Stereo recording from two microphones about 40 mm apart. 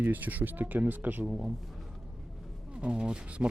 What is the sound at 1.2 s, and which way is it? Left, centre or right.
Speech, centre.